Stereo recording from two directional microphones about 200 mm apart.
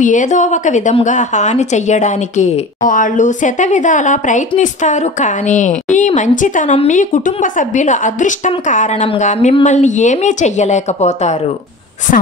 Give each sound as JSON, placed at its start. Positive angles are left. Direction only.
{"t": 0.0, "sound": "a woman's voice", "side_deg": 40}